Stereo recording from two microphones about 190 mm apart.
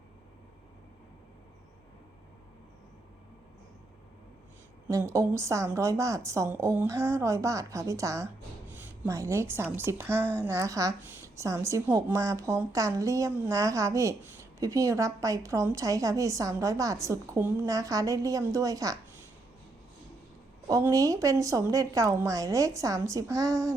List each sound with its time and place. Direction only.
4.9 s a woman's voice: 15° right (ahead or behind)
20.7 s a woman's voice: 15° right (ahead or behind)